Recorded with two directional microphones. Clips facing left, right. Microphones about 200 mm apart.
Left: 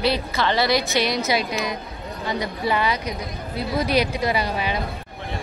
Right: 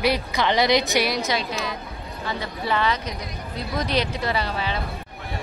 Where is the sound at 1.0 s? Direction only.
Centre (ahead or behind).